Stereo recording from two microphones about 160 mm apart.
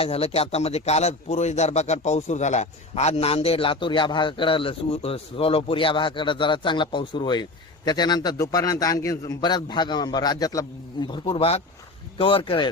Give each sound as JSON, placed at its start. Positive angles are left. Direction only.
{"t": 0.0, "sound": "a man's voice", "side_deg": 40}